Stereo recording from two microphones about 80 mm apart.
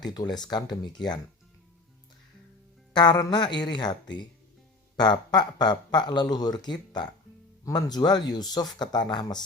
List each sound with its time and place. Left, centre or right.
0.0 s speech: left
2.9 s speech: left
7.6 s speech: left